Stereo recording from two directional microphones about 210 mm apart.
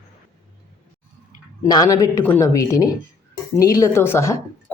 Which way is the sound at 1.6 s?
20° left (ahead or behind).